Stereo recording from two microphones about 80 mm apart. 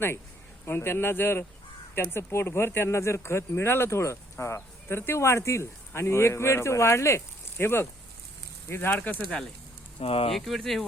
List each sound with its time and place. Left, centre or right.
0.6 s speech: left
10.3 s speech: centre